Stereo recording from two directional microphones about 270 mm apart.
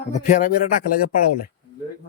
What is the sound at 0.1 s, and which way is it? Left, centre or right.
Speech, left.